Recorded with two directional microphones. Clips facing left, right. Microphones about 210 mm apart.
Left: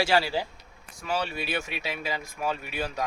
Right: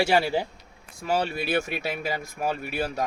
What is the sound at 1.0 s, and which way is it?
Speech, 45° right (ahead or behind).